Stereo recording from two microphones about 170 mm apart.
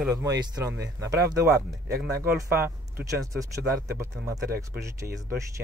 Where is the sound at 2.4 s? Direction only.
15° right (ahead or behind).